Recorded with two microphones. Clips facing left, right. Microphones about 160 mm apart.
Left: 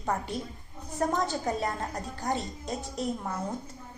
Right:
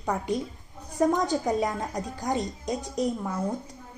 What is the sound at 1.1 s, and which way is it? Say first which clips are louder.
A woman's voice: right 4 dB; 15° right (ahead or behind).